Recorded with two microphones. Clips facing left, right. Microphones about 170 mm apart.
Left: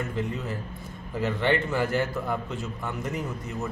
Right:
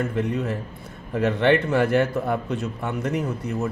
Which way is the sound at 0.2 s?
65° right (ahead or behind).